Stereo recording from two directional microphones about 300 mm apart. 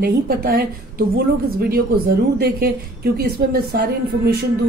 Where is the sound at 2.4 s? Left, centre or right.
Right.